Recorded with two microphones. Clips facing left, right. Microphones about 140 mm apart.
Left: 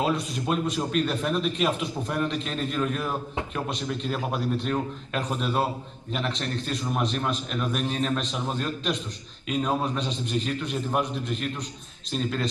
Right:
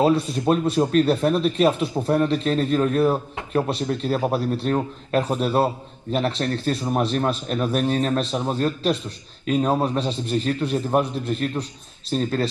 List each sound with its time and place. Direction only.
0.0 s speech: 35° right (ahead or behind)